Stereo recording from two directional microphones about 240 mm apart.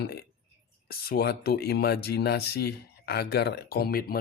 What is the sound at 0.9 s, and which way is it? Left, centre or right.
Speech, left.